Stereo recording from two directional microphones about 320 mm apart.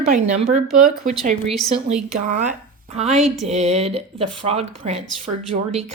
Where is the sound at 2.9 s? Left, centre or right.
Centre.